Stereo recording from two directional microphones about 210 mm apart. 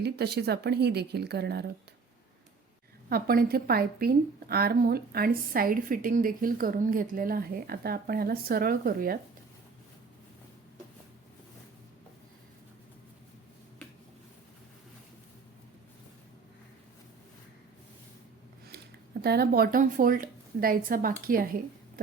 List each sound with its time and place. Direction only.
0.0 s a woman's voice: 50° right (ahead or behind)
3.1 s a woman's voice: 45° right (ahead or behind)
19.2 s a woman's voice: 45° right (ahead or behind)